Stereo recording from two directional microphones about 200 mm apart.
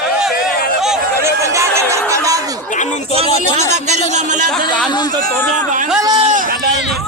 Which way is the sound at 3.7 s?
35° right (ahead or behind).